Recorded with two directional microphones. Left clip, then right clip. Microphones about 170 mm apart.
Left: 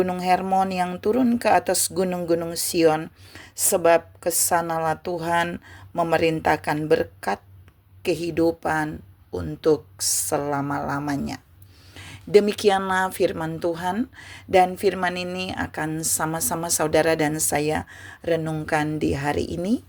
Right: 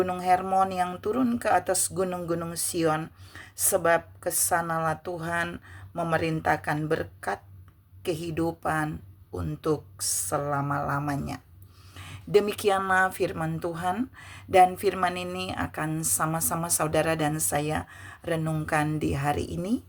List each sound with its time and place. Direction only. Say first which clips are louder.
0.0 s a woman's voice: left 3 dB; 30° left (ahead or behind)